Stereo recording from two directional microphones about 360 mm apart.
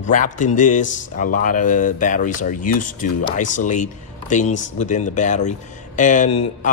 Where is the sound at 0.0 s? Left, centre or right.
Left.